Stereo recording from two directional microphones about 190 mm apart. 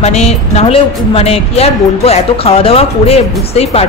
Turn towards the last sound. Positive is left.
turn(degrees=30)  # may be behind; listen again after turning